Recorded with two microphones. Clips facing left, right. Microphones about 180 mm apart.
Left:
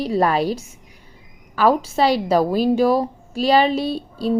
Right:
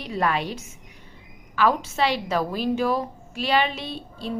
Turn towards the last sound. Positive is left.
turn(degrees=35)  # may be behind; listen again after turning